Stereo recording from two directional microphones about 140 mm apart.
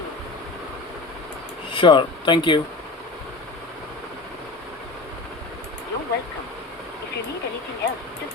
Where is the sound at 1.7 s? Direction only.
35° left (ahead or behind).